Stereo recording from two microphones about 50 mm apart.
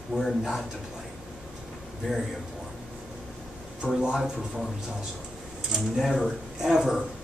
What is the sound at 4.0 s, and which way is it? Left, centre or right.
Speech, centre.